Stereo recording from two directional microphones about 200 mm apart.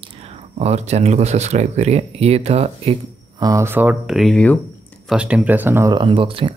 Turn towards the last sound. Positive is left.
turn(degrees=-25)  # may be behind; listen again after turning